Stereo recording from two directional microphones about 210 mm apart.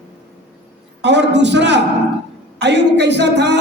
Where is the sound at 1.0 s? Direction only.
55° right (ahead or behind).